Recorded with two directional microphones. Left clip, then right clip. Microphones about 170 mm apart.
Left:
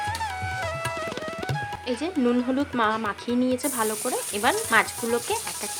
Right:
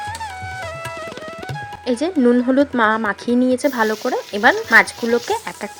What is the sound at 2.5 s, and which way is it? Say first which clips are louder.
Speech: right 8 dB; 35° right (ahead or behind).